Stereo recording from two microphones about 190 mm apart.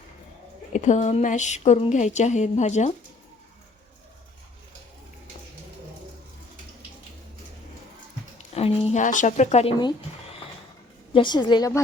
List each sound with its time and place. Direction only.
0.7 s speech: 40° left (ahead or behind)
8.5 s speech: 30° left (ahead or behind)
11.1 s a woman's voice: 25° left (ahead or behind)